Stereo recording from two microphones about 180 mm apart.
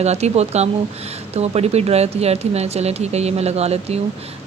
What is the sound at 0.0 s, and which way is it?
Speech, 35° right (ahead or behind).